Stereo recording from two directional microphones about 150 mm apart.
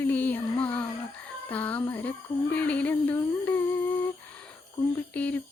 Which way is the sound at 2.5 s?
10° left (ahead or behind).